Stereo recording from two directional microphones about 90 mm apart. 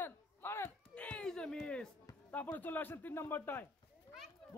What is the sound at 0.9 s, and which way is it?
Speech, 15° left (ahead or behind).